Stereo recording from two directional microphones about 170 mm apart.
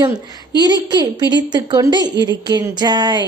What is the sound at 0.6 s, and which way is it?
A woman's voice, 25° right (ahead or behind).